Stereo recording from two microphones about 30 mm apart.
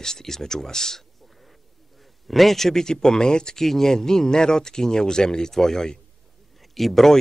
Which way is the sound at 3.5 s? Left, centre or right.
Centre.